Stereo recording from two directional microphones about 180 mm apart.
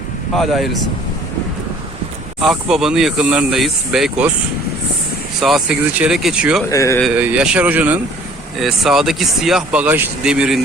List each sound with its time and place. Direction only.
0.3 s speech: centre (ahead or behind)
2.4 s speech: centre (ahead or behind)
5.4 s speech: centre (ahead or behind)
6.7 s a man's voice: 15° left (ahead or behind)
7.0 s speech: 5° right (ahead or behind)